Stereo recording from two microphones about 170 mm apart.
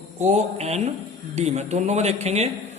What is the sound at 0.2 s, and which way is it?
Speech, 40° right (ahead or behind).